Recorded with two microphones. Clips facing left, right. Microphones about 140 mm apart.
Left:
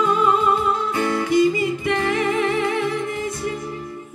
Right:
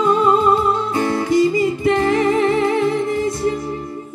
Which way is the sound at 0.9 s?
35° right (ahead or behind).